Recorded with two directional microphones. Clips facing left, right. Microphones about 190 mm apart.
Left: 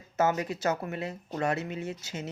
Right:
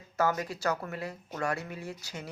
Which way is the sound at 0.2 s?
20° left (ahead or behind).